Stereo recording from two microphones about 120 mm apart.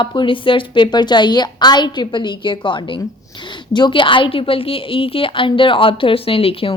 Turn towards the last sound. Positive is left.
turn(degrees=50)  # may be behind; listen again after turning